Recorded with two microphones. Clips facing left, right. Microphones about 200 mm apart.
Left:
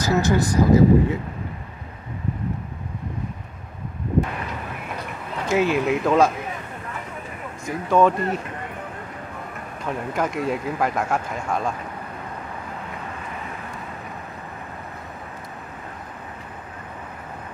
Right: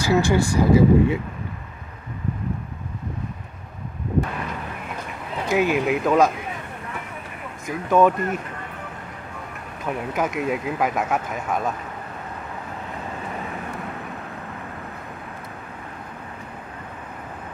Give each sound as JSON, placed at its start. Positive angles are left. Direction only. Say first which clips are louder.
{"t": 0.0, "sound": "speech", "louder": "right 1 dB", "side_deg": -30}
{"t": 5.5, "sound": "speech", "louder": "even", "side_deg": 0}
{"t": 7.6, "sound": "speech", "louder": "even", "side_deg": 0}
{"t": 9.8, "sound": "speech", "louder": "even", "side_deg": -5}